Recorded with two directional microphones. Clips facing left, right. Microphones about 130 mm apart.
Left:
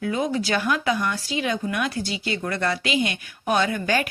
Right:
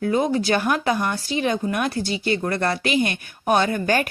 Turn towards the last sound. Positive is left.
turn(degrees=-45)  # may be behind; listen again after turning